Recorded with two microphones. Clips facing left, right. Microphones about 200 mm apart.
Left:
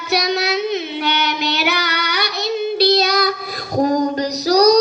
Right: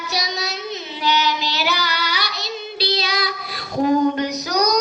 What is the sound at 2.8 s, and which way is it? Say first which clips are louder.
Child singing: left 7 dB; 45° left (ahead or behind).